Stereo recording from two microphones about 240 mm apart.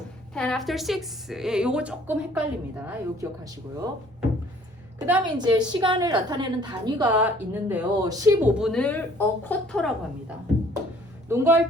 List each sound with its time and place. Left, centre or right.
0.3 s a woman's voice: centre
4.9 s a woman's voice: centre
5.4 s a woman's voice: centre
7.2 s a woman's voice: centre